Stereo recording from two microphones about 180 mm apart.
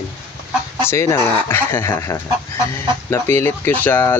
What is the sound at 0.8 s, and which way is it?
Speech, 15° left (ahead or behind).